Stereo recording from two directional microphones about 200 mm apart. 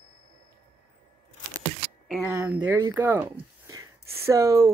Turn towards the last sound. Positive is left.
turn(degrees=-15)  # may be behind; listen again after turning